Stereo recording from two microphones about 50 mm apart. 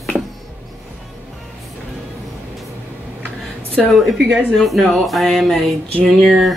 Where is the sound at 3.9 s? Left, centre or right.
Centre.